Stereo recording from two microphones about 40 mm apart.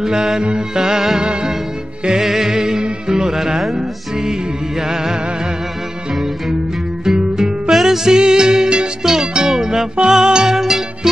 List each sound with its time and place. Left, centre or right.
0.0 s music: centre
7.2 s music: centre
7.7 s music: centre